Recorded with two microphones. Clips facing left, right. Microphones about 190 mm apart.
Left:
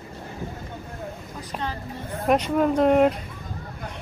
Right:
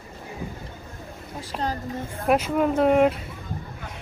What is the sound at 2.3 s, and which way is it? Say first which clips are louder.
Speech: left 1 dB; 5° right (ahead or behind).